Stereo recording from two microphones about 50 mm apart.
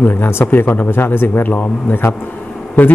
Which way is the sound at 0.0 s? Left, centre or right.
Left.